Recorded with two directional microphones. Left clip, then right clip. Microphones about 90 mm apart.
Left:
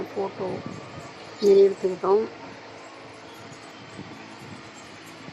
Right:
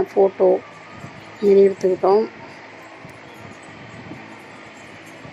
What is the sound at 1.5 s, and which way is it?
Speech, 30° right (ahead or behind).